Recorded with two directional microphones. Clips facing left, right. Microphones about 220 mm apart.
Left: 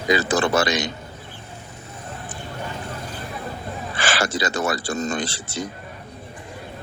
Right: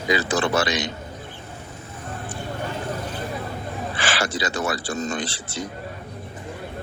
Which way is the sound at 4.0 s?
45° left (ahead or behind).